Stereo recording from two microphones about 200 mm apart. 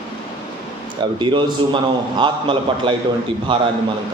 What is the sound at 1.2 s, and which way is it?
A man's voice, 25° right (ahead or behind).